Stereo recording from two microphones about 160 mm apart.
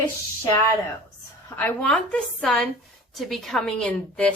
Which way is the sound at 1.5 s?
10° left (ahead or behind).